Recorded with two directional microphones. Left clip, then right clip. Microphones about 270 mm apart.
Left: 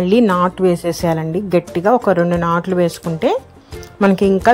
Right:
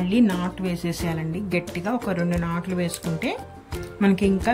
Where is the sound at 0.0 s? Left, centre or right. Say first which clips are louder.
Left 10 dB; centre.